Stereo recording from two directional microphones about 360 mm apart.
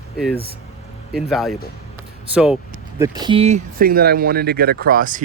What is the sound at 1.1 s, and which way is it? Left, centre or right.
Speech, centre.